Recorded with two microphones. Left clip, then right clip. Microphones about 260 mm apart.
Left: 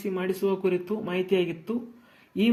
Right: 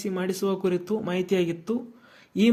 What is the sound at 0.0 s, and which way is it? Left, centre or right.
A man's voice, right.